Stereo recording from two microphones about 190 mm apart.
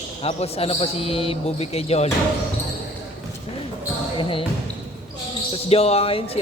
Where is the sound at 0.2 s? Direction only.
35° left (ahead or behind).